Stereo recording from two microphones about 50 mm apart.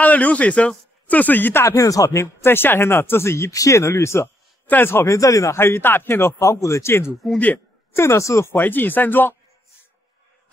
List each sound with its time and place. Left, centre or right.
0.0 s speech: left
1.6 s a man's voice: left
2.4 s speech: left
3.9 s speech: left
4.6 s speech: left
4.9 s speech: left
5.6 s speech: left
6.4 s a man's voice: left
8.5 s speech: left